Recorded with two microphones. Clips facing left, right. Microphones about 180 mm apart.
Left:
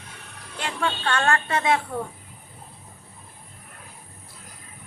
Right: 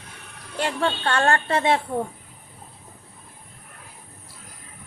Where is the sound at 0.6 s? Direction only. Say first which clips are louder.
Right 3 dB; 35° right (ahead or behind).